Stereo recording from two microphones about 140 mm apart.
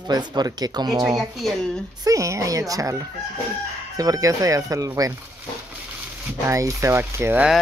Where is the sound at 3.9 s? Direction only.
25° right (ahead or behind).